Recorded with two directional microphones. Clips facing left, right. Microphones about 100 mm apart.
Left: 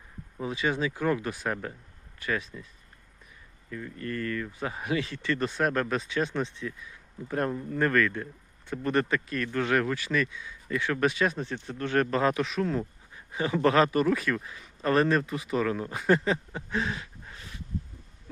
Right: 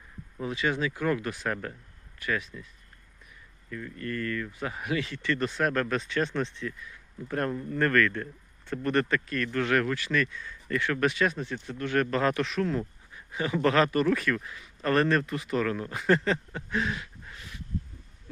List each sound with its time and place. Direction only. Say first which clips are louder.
0.3 s speech: even; 20° left (ahead or behind)
3.7 s speech: even; 25° left (ahead or behind)